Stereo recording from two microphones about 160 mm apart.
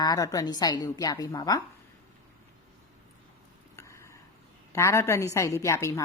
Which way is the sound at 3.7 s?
20° left (ahead or behind).